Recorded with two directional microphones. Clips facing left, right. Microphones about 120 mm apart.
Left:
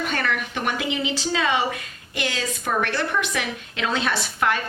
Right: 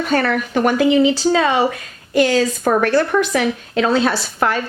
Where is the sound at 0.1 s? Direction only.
40° right (ahead or behind).